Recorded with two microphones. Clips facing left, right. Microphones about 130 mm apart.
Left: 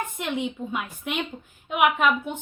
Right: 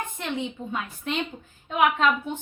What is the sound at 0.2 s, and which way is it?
A woman's voice, 15° left (ahead or behind).